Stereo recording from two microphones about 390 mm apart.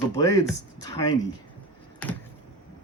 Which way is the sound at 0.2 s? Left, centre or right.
Centre.